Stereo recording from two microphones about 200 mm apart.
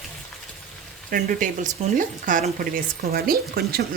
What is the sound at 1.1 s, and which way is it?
Speech, 40° right (ahead or behind).